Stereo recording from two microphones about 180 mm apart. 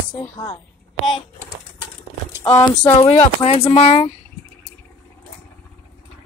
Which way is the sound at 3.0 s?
30° left (ahead or behind).